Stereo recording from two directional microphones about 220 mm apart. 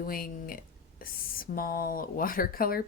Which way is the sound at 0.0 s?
40° left (ahead or behind).